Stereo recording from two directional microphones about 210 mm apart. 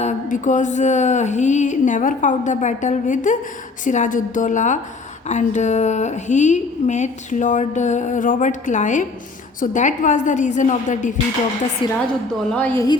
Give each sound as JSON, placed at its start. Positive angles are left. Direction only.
{"t": 0.0, "sound": "a woman's voice", "side_deg": 35}
{"t": 11.8, "sound": "a woman's voice", "side_deg": 25}
{"t": 12.5, "sound": "a woman's voice", "side_deg": 5}